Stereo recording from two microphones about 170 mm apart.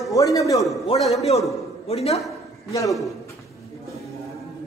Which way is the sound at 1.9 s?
35° left (ahead or behind).